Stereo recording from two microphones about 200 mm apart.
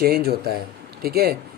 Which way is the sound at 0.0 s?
50° right (ahead or behind).